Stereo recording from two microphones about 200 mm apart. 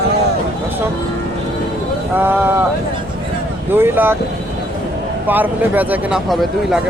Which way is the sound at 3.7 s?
10° right (ahead or behind).